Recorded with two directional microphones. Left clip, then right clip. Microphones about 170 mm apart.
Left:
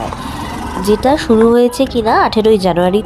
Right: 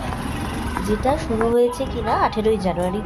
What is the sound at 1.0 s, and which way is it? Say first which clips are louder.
A woman's voice: left 10 dB; 55° left (ahead or behind).